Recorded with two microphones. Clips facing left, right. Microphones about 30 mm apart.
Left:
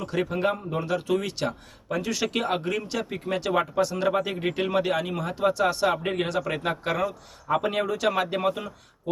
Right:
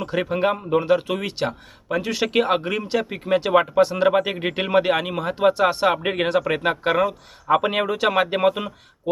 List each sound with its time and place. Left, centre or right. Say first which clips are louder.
0.0 s a man's voice: right 4 dB; right